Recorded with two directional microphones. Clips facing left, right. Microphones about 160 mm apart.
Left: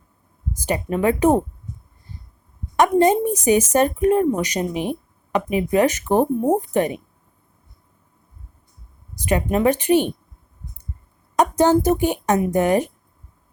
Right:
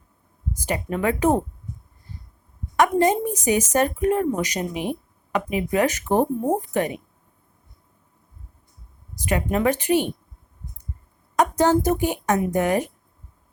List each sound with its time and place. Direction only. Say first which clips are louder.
0.7 s a woman's voice: left 4 dB; 20° left (ahead or behind)
2.7 s a woman's voice: left 3 dB; 25° left (ahead or behind)
9.3 s a woman's voice: left 3 dB; 25° left (ahead or behind)
11.6 s a woman's voice: left 4 dB; 25° left (ahead or behind)